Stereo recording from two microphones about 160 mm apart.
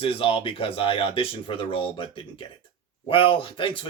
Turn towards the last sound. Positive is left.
turn(degrees=35)  # may be behind; listen again after turning